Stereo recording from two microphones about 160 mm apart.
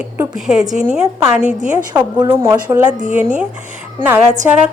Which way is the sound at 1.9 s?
25° right (ahead or behind).